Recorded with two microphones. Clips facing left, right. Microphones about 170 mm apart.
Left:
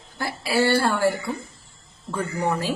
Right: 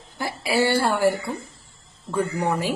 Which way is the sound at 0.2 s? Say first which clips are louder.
Even; 15° right (ahead or behind).